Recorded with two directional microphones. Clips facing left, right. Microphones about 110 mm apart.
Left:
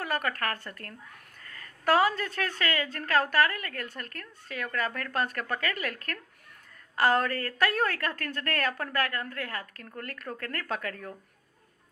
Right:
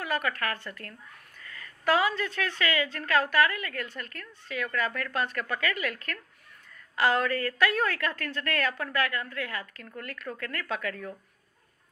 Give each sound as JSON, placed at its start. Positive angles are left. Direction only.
{"t": 0.0, "sound": "a woman's voice", "side_deg": 45}